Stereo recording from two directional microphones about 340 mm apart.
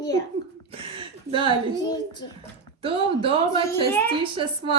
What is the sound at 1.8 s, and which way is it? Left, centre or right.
Speech, centre.